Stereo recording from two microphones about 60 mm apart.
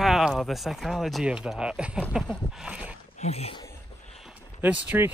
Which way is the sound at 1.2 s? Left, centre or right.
Centre.